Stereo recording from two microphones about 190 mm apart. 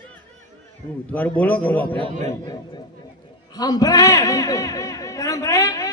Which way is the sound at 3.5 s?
20° left (ahead or behind).